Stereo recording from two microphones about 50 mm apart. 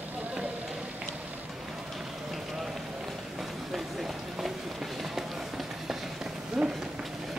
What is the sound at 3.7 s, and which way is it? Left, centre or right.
Run, centre.